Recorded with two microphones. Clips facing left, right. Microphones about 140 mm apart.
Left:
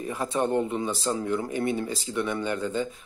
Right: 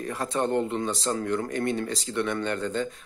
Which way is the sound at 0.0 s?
5° left (ahead or behind).